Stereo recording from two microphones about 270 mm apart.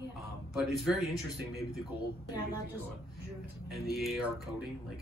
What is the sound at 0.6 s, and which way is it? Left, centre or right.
Speech, centre.